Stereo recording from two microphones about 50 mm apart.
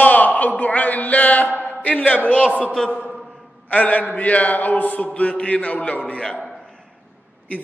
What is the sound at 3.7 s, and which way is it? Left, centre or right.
Mantra, left.